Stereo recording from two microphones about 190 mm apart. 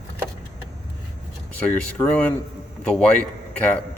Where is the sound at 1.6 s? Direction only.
5° left (ahead or behind).